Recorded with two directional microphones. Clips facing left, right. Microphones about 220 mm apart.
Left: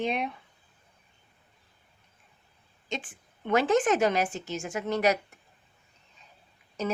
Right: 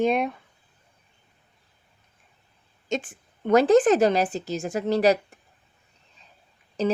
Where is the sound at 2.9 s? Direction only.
45° right (ahead or behind).